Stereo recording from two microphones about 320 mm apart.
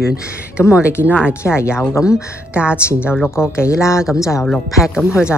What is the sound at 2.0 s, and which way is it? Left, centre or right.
Speech, centre.